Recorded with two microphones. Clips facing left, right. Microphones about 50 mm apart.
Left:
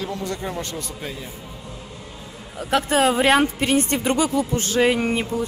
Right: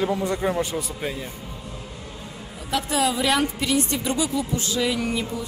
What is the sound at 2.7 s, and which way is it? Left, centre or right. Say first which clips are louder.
A woman's voice: left 5 dB; left.